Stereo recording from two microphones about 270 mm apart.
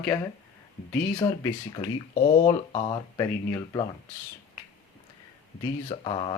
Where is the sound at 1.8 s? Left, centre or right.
Left.